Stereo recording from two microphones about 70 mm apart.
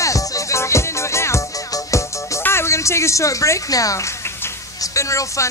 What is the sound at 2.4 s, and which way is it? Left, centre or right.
Speech, left.